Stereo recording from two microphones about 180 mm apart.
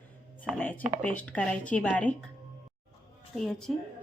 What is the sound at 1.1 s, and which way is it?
Speech, 5° left (ahead or behind).